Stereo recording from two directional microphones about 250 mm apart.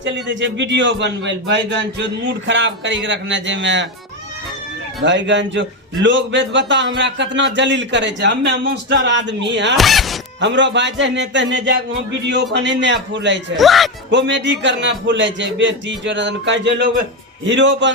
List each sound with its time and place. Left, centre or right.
0.0 s a man's voice: right
5.0 s a man's voice: right
9.7 s speech: centre
10.4 s a man's voice: right
13.6 s speech: centre
14.1 s a man's voice: right